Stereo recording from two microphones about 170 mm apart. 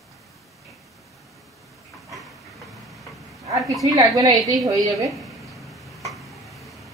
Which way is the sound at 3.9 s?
25° right (ahead or behind).